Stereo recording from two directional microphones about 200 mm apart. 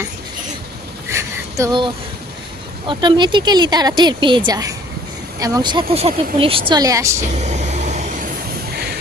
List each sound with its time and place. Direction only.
1.1 s a sound: 15° right (ahead or behind)
2.8 s speech: 25° right (ahead or behind)
7.3 s vehicle: 35° right (ahead or behind)